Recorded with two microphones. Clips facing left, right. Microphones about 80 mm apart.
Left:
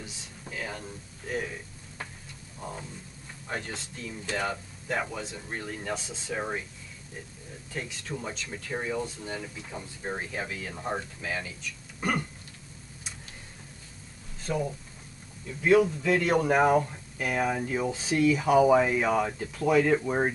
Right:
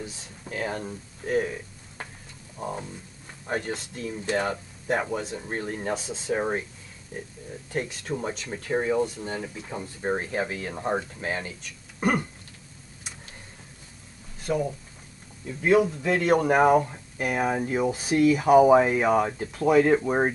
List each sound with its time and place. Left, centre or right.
0.0 s speech: right
2.6 s speech: right
3.4 s speech: right
4.3 s speech: right
5.9 s speech: right
7.7 s speech: right
8.1 s speech: right
10.7 s speech: right
11.1 s speech: right
14.4 s speech: centre
15.4 s speech: right